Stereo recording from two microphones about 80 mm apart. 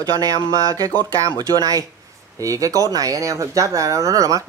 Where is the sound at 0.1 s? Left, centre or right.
Right.